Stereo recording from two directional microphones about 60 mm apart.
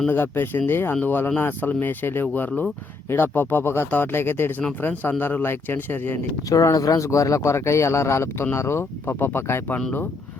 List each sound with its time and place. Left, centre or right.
0.1 s speech: left
6.5 s speech: left